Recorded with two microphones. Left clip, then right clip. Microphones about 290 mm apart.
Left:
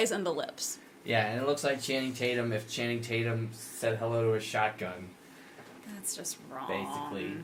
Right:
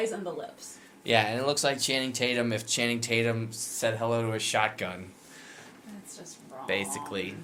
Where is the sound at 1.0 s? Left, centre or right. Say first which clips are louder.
Right 4 dB; right.